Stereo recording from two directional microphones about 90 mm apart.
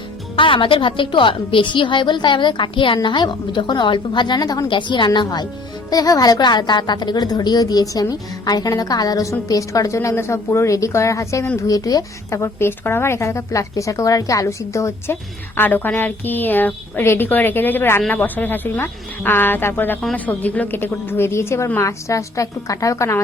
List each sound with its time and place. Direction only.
0.3 s a woman's voice: 75° left (ahead or behind); by 4.6 s 50° left (ahead or behind)
4.7 s a woman's voice: 60° left (ahead or behind); by 12.4 s 40° left (ahead or behind)
12.4 s a woman's voice: 25° left (ahead or behind)